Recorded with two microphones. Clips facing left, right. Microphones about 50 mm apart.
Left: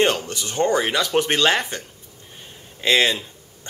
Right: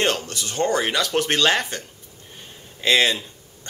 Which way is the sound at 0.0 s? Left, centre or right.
Centre.